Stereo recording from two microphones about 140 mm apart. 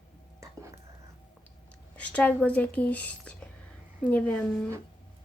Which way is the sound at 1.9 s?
10° left (ahead or behind).